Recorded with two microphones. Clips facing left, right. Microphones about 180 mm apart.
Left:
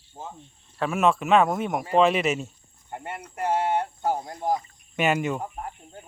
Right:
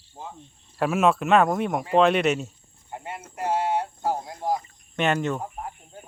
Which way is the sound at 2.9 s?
55° left (ahead or behind).